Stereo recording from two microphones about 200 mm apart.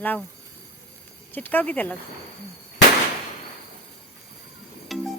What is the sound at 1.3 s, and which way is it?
Speech, 10° left (ahead or behind).